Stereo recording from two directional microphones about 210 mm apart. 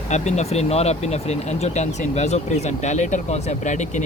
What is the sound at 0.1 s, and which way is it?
Speech, 35° left (ahead or behind).